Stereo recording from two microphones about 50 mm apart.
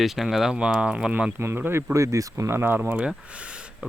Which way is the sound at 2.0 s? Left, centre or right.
Right.